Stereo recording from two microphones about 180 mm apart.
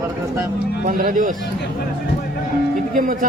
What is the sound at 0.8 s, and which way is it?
Speech, 50° right (ahead or behind).